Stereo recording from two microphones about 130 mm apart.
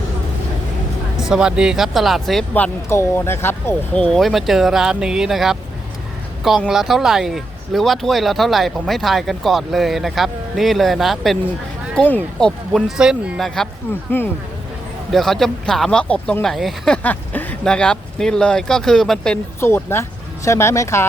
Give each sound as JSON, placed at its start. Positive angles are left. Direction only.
{"t": 1.2, "sound": "speech", "side_deg": -5}
{"t": 2.6, "sound": "speech", "side_deg": 20}
{"t": 6.7, "sound": "speech", "side_deg": 0}
{"t": 13.0, "sound": "speech", "side_deg": -5}
{"t": 14.2, "sound": "speech", "side_deg": 15}
{"t": 15.1, "sound": "speech", "side_deg": 0}
{"t": 19.5, "sound": "speech", "side_deg": 20}